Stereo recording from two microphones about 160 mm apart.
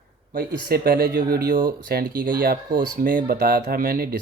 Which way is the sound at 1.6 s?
70° right (ahead or behind).